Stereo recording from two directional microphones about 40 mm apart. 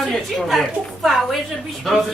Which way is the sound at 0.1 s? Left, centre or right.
Centre.